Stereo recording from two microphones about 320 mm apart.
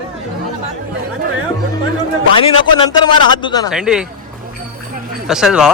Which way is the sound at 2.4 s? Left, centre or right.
Centre.